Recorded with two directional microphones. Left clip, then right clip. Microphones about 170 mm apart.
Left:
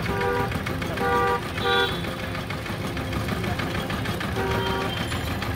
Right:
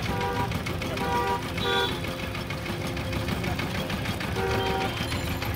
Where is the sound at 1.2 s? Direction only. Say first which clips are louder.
Left 4 dB; 70° right (ahead or behind).